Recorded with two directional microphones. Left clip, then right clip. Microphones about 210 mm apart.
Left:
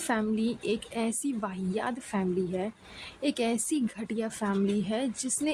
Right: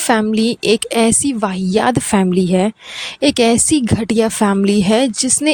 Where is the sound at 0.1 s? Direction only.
50° right (ahead or behind).